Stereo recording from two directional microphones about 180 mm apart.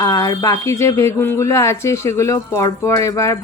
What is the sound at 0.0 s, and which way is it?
Speech, 20° left (ahead or behind).